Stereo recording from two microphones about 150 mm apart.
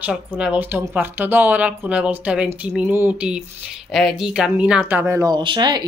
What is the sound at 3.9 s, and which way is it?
A woman's voice, centre (ahead or behind).